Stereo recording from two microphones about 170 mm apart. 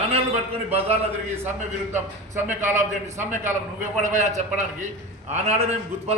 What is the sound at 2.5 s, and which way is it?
A man's voice, 45° right (ahead or behind).